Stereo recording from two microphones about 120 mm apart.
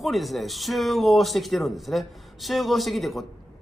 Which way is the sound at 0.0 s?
Centre (ahead or behind).